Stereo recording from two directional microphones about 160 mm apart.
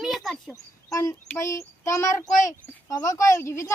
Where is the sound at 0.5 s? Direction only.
20° left (ahead or behind).